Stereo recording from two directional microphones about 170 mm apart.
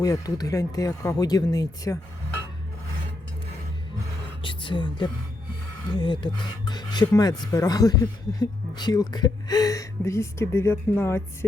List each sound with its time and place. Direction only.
0.0 s speech: 20° left (ahead or behind)
4.4 s speech: 30° left (ahead or behind)